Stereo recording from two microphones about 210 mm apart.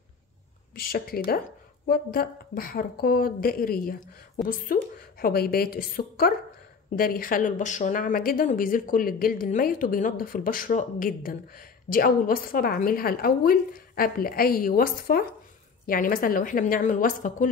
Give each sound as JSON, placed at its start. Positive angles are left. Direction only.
{"t": 0.7, "sound": "a woman's voice", "side_deg": 45}